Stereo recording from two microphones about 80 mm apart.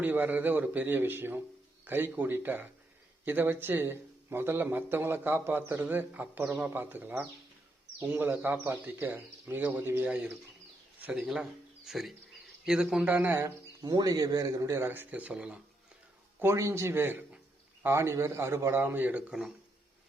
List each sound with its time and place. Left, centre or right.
0.0 s a man's voice: right
11.0 s speech: centre
13.2 s a man's voice: right
13.8 s a man's voice: right
14.8 s speech: right
16.4 s a man's voice: right